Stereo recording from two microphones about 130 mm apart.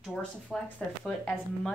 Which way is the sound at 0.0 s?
5° left (ahead or behind).